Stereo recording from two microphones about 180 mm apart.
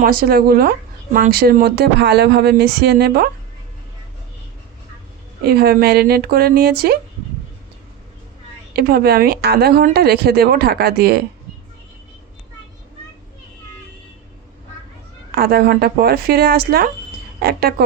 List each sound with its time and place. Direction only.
0.0 s a woman's voice: 55° right (ahead or behind)
5.4 s a woman's voice: 60° right (ahead or behind)
8.7 s a woman's voice: 60° right (ahead or behind)
15.4 s a woman's voice: 55° right (ahead or behind)